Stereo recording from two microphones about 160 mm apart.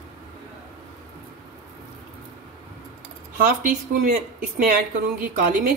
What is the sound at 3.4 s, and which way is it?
Speech, 55° right (ahead or behind).